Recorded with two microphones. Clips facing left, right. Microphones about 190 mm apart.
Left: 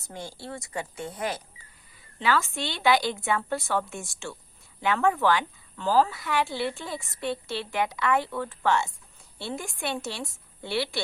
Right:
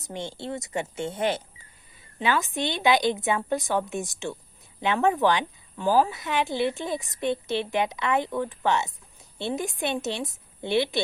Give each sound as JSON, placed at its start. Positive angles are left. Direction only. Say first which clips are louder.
{"t": 0.0, "sound": "speech", "louder": "right 5 dB", "side_deg": -25}